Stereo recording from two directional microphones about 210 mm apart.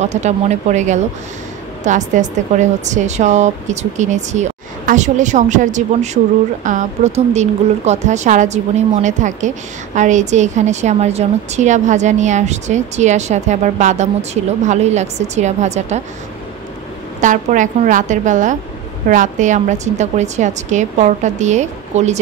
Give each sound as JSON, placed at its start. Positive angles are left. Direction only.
{"t": 0.0, "sound": "a woman's voice", "side_deg": -30}
{"t": 17.2, "sound": "a woman's voice", "side_deg": -35}